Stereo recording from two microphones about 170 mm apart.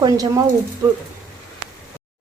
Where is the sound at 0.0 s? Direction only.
20° right (ahead or behind).